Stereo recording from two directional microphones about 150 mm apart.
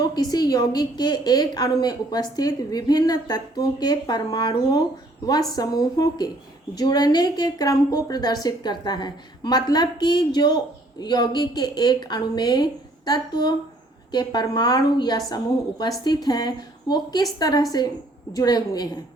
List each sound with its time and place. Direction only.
0.0 s a woman's voice: 25° left (ahead or behind)